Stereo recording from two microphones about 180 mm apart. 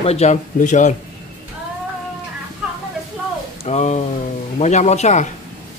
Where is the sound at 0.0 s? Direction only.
35° left (ahead or behind).